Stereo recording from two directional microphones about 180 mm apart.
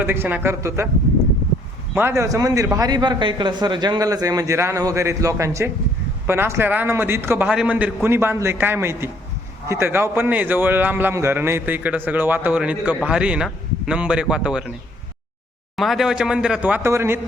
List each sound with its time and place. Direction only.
0.0 s a man's voice: 10° right (ahead or behind)
2.0 s a man's voice: 15° right (ahead or behind)
15.7 s a man's voice: centre (ahead or behind)